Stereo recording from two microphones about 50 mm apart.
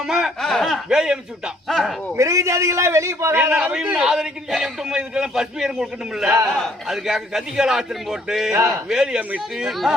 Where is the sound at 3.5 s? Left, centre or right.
Centre.